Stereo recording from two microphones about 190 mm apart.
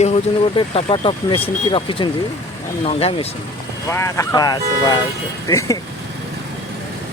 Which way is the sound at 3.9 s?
15° left (ahead or behind).